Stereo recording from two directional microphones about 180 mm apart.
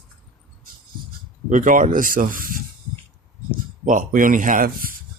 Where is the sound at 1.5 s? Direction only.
45° right (ahead or behind).